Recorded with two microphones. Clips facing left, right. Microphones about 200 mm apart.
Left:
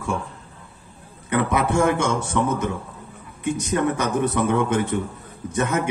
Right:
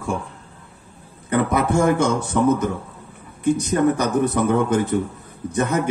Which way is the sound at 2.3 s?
40° right (ahead or behind).